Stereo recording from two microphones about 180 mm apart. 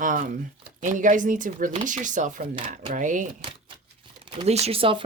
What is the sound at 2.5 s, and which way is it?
Speech, 30° right (ahead or behind).